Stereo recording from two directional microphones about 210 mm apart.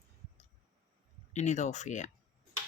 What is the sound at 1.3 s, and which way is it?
Speech, 35° left (ahead or behind).